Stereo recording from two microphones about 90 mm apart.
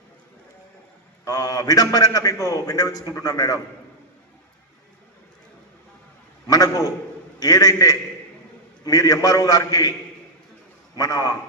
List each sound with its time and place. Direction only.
1.2 s a man's voice: 45° left (ahead or behind)
6.5 s a man's voice: 45° left (ahead or behind)
10.9 s a man's voice: 45° left (ahead or behind)